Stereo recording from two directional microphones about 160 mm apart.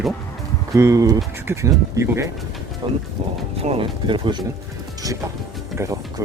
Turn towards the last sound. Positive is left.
turn(degrees=-15)  # may be behind; listen again after turning